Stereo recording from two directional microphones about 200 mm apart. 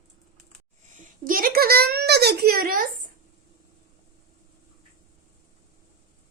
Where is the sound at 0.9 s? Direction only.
45° right (ahead or behind).